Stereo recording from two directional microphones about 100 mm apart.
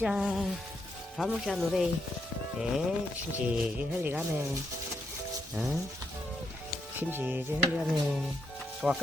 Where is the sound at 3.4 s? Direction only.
15° right (ahead or behind).